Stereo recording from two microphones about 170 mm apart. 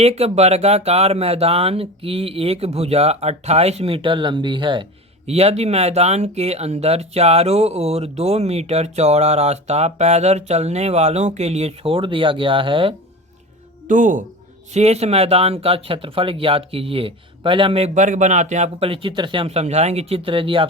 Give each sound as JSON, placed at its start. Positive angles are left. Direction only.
{"t": 0.0, "sound": "speech", "side_deg": -40}
{"t": 13.8, "sound": "speech", "side_deg": -50}